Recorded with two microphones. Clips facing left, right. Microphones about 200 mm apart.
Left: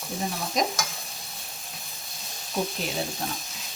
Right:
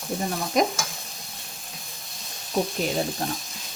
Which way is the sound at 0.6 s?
55° right (ahead or behind).